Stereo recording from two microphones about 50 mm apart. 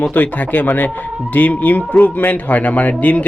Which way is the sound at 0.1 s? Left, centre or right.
Left.